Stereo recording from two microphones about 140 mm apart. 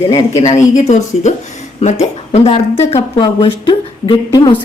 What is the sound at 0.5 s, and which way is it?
A woman's voice, 60° left (ahead or behind).